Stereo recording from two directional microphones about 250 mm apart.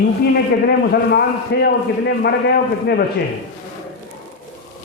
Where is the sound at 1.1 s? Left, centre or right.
Left.